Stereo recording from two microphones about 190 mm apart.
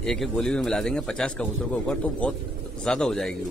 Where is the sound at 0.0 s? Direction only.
5° left (ahead or behind).